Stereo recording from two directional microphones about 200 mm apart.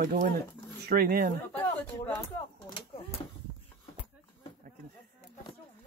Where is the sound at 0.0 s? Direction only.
40° right (ahead or behind).